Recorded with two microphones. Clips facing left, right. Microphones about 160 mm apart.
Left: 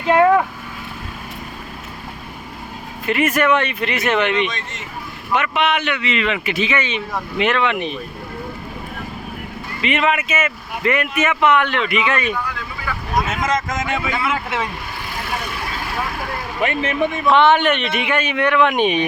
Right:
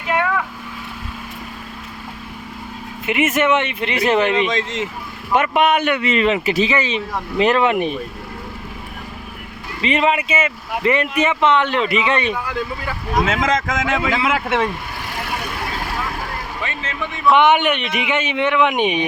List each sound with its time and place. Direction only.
0.0 s a sound: 35° left (ahead or behind)
3.1 s speech: 20° right (ahead or behind)
4.5 s speech: 90° right
5.3 s speech: 45° right (ahead or behind)
9.8 s speech: 30° right (ahead or behind)
13.3 s speech: 90° right; by 14.7 s 70° right (ahead or behind)
16.8 s speech: 20° left (ahead or behind)
17.3 s speech: 15° right (ahead or behind)